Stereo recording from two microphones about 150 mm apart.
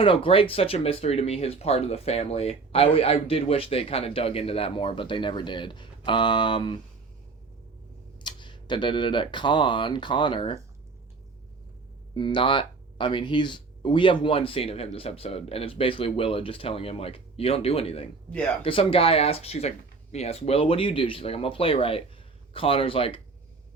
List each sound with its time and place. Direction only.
0.0 s speech: 35° left (ahead or behind)
8.2 s speech: 30° left (ahead or behind)
12.1 s speech: 35° left (ahead or behind)
18.3 s speech: 10° left (ahead or behind)
18.6 s speech: 40° left (ahead or behind)